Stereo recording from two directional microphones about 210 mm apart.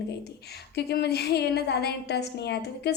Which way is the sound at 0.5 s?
50° left (ahead or behind).